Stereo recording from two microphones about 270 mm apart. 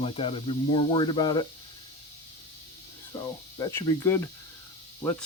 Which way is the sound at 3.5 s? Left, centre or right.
Centre.